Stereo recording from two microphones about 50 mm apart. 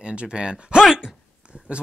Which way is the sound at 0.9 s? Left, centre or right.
Centre.